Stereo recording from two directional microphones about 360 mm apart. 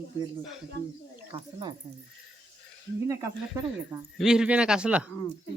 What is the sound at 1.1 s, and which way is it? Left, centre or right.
Speech, centre.